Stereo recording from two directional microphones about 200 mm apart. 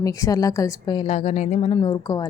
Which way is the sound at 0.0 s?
15° left (ahead or behind).